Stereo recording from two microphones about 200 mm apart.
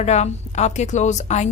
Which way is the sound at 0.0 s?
35° left (ahead or behind).